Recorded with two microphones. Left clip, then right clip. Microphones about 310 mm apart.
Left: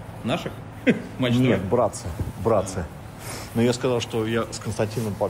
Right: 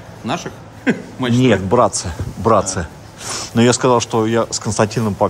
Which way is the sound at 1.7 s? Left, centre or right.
Right.